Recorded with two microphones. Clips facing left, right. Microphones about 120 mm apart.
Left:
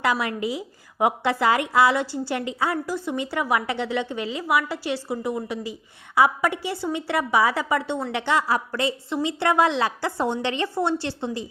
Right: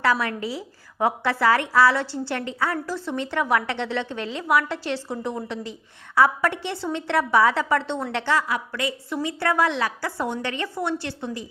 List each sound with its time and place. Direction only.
0.0 s a woman's voice: 15° left (ahead or behind)
8.4 s a woman's voice: 35° left (ahead or behind)